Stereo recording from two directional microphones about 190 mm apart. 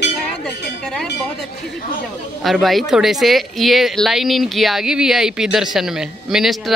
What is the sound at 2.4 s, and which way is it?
Speech, centre (ahead or behind).